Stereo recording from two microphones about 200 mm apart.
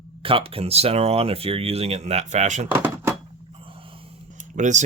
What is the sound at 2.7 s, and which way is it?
Speech, 10° right (ahead or behind).